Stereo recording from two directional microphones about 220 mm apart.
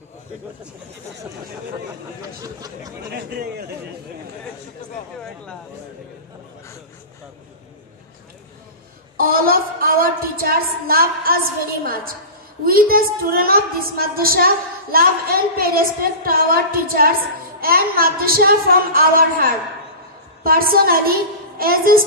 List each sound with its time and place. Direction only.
2.4 s speech: 15° right (ahead or behind)
3.1 s a woman's voice: 45° right (ahead or behind)
9.1 s a sound: 40° right (ahead or behind)
11.8 s a woman's voice: 40° right (ahead or behind)
20.4 s a woman's voice: 40° right (ahead or behind)